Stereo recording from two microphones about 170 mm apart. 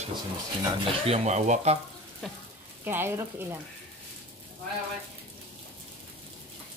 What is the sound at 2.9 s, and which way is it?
Speech, 15° right (ahead or behind).